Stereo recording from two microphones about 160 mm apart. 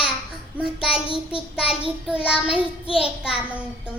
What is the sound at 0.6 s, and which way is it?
Child singing, 5° right (ahead or behind).